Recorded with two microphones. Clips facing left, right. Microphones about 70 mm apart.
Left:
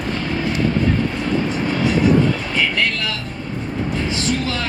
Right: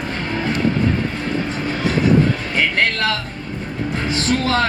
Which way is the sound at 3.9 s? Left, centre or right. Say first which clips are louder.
Right 3 dB; right.